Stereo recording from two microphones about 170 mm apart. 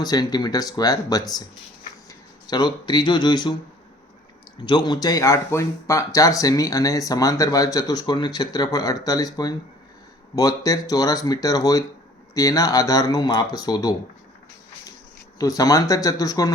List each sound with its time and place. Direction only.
0.0 s speech: 25° left (ahead or behind)
4.5 s speech: 25° left (ahead or behind)
15.4 s speech: 20° left (ahead or behind)